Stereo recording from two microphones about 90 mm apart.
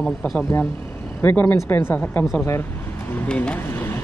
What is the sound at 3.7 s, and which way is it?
Vehicle, 25° left (ahead or behind).